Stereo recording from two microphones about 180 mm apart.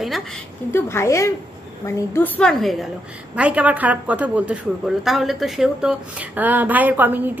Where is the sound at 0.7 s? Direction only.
15° left (ahead or behind).